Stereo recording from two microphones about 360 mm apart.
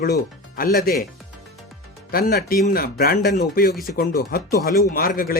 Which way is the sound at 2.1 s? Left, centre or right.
Left.